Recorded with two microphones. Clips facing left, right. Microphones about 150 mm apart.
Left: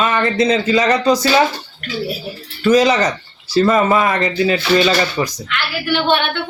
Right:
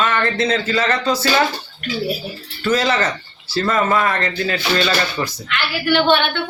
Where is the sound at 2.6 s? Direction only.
15° left (ahead or behind).